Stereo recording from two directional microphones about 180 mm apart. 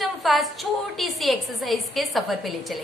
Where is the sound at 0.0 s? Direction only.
Centre (ahead or behind).